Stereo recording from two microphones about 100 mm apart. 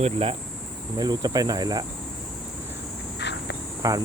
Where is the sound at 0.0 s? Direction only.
80° right.